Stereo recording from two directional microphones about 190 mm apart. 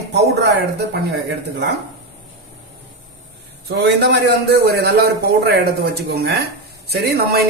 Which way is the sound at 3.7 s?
60° right (ahead or behind).